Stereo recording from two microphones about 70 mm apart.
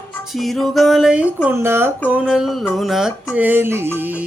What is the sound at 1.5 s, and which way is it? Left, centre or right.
Speech, right.